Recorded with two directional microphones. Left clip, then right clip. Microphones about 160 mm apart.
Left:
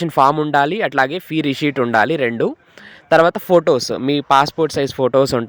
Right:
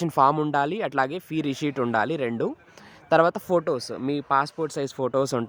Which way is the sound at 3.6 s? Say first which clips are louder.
Left 11 dB; 35° left (ahead or behind).